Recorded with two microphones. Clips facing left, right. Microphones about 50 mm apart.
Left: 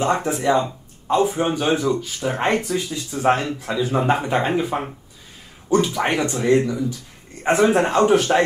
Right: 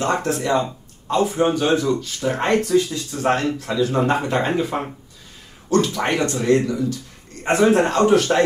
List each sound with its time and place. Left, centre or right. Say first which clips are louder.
0.0 s speech: left 1 dB; centre